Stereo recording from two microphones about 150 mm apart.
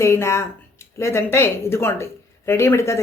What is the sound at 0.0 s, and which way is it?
Speech, 20° left (ahead or behind).